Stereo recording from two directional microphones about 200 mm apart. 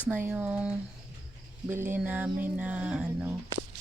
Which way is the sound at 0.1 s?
5° right (ahead or behind).